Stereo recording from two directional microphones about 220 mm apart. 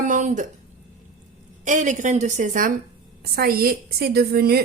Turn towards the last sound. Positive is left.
turn(degrees=-45)  # may be behind; listen again after turning